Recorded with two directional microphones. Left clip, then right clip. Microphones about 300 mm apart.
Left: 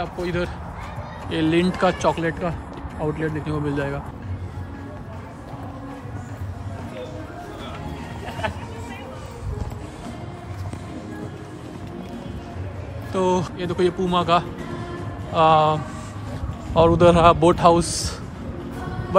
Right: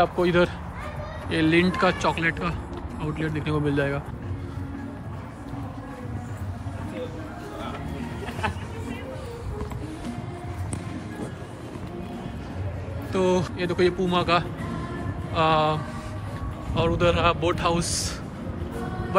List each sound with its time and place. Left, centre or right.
0.0 s speech: centre
13.1 s a man's voice: centre